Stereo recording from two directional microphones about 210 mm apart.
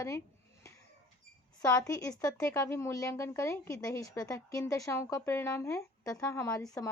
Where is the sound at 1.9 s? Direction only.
15° left (ahead or behind).